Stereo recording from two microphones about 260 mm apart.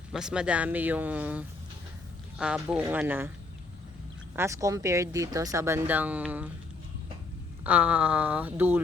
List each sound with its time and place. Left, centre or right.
0.1 s speech: centre
4.4 s speech: centre
7.6 s speech: centre